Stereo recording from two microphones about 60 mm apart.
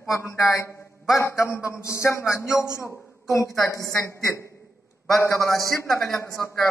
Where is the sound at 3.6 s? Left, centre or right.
Left.